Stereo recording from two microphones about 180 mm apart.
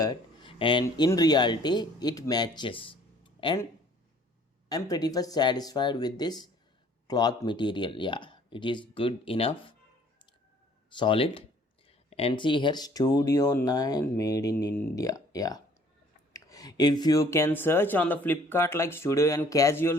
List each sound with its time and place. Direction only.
0.0 s speech: 25° left (ahead or behind)
4.7 s speech: 20° left (ahead or behind)
10.8 s speech: 25° left (ahead or behind)